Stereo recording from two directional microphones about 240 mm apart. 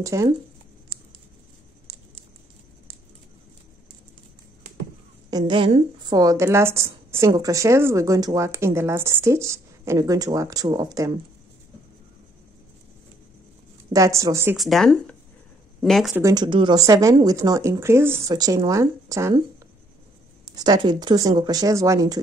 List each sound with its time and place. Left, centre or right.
0.0 s speech: centre
5.4 s speech: right
13.9 s speech: centre
16.2 s speech: centre
20.5 s speech: centre